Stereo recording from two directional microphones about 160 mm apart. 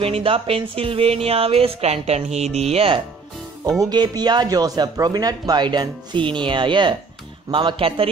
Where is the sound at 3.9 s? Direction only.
25° right (ahead or behind).